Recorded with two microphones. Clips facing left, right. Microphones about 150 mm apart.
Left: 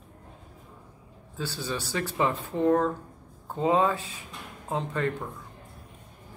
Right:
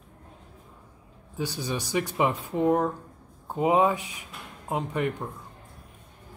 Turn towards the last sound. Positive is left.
turn(degrees=-15)  # may be behind; listen again after turning